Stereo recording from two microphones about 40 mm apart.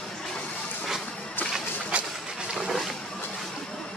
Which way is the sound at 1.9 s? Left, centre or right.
Right.